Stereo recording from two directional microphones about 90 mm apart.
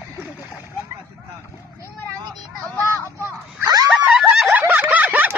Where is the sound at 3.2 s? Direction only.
40° right (ahead or behind).